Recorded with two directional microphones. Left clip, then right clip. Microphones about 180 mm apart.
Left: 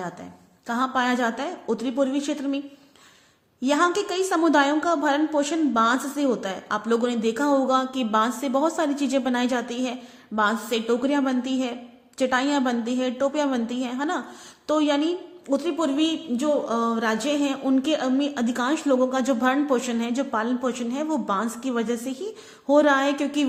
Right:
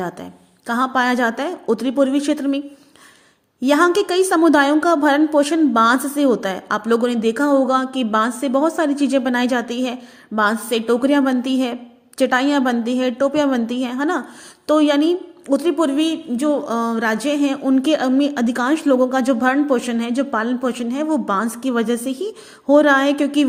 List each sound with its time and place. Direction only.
0.7 s a woman's voice: 40° right (ahead or behind)
3.6 s a woman's voice: 35° right (ahead or behind)